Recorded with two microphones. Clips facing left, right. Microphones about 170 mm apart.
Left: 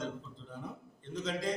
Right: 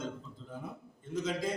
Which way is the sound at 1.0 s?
5° right (ahead or behind).